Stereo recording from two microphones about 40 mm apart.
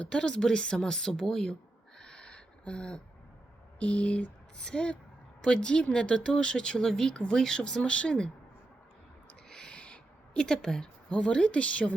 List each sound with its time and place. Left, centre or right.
0.0 s a woman's voice: left
2.0 s owl: centre
3.8 s a sound: left
4.5 s a woman's voice: centre
7.9 s speech: left
9.5 s owl: centre
9.8 s a sound: left
11.1 s speech: left